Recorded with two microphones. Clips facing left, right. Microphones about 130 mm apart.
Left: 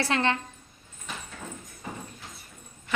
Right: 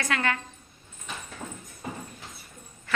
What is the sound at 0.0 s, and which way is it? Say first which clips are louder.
Speech: left 2 dB; 30° left (ahead or behind).